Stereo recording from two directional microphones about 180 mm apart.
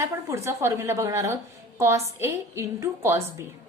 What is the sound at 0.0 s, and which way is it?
A woman's voice, 15° right (ahead or behind).